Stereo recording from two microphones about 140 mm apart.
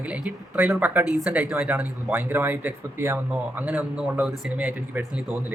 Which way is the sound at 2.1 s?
15° right (ahead or behind).